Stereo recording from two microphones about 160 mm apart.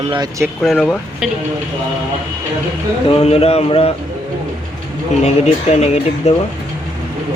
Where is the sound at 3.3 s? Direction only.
40° left (ahead or behind).